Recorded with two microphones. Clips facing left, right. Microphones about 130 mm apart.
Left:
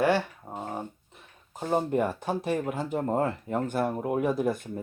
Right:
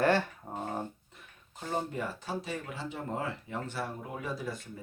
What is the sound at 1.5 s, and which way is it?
Speech, 45° left (ahead or behind).